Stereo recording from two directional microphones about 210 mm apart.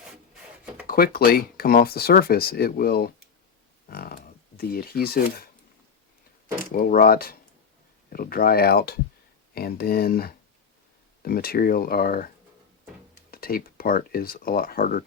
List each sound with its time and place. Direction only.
0.9 s speech: 45° left (ahead or behind)
6.7 s speech: 40° left (ahead or behind)
13.3 s speech: 45° left (ahead or behind)